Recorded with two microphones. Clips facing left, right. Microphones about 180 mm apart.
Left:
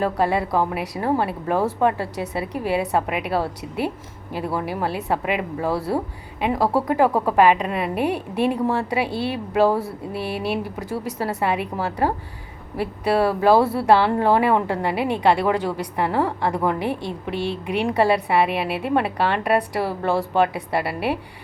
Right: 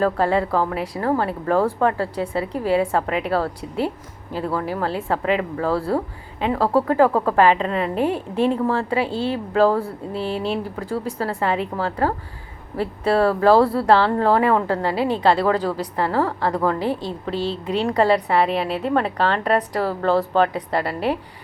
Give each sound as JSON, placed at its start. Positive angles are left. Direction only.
{"t": 0.0, "sound": "a woman's voice", "side_deg": 15}